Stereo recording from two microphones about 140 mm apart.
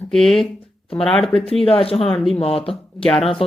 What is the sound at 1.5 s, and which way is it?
Speech, 40° left (ahead or behind).